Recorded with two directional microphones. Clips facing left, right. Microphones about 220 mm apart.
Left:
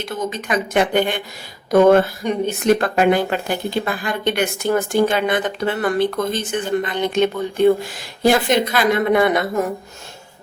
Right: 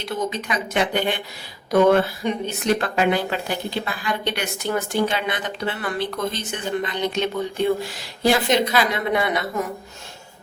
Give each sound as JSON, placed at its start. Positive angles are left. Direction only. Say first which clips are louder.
{"t": 0.0, "sound": "speech", "louder": "left 1 dB", "side_deg": 50}